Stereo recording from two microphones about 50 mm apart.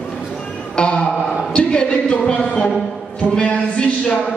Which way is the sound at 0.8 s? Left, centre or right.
Left.